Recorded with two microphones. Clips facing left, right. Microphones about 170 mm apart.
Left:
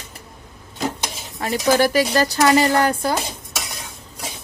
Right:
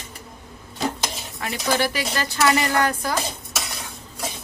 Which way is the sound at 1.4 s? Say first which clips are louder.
Left 6 dB; 40° left (ahead or behind).